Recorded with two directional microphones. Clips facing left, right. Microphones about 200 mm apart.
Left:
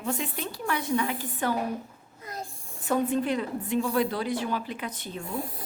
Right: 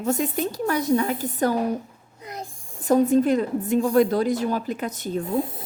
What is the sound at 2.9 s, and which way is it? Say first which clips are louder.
A woman's voice: right 8 dB; 40° right (ahead or behind).